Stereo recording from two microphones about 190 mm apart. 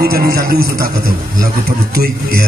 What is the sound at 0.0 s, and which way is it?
A man's voice, 55° right (ahead or behind).